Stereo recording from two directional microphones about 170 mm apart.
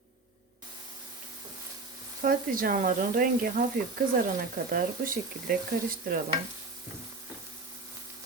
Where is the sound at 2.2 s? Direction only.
55° right (ahead or behind).